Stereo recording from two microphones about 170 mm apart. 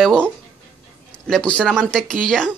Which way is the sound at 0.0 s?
5° left (ahead or behind).